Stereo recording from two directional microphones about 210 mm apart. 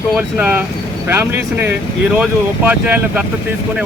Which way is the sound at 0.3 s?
10° right (ahead or behind).